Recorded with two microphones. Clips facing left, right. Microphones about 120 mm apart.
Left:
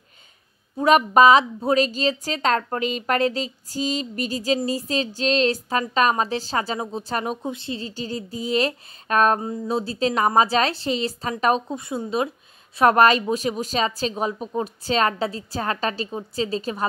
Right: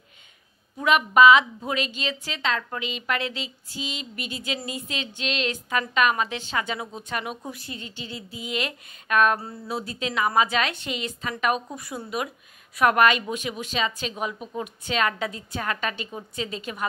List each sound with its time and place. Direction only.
0.7 s a woman's voice: 35° left (ahead or behind)